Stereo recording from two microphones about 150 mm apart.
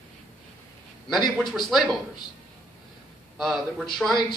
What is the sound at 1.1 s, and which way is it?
Speech, centre (ahead or behind).